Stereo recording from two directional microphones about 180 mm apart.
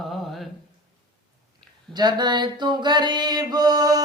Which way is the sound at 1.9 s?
25° right (ahead or behind).